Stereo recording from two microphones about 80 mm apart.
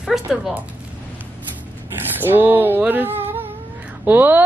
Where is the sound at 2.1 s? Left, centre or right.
Right.